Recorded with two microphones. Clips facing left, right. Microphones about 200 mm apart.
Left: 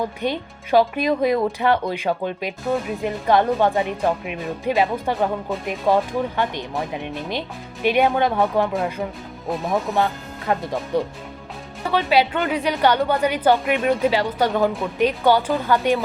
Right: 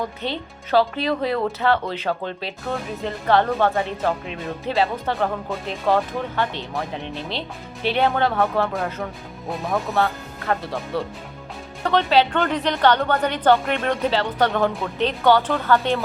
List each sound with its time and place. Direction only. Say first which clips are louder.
0.0 s a woman's voice: left 3 dB; 15° left (ahead or behind)
9.9 s a woman's voice: left 1 dB; 15° left (ahead or behind)